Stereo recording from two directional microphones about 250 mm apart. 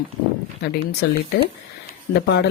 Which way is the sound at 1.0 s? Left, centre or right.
Left.